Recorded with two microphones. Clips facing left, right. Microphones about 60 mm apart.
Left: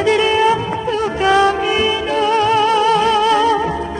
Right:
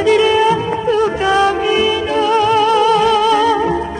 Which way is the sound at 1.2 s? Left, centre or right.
Right.